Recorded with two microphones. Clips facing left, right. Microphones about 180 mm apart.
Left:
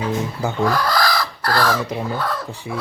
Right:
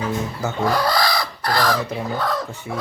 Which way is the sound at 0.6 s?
25° right (ahead or behind).